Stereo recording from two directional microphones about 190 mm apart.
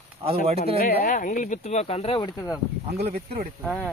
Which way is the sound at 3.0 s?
55° right (ahead or behind).